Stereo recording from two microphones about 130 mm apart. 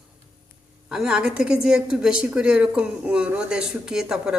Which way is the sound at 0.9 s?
5° right (ahead or behind).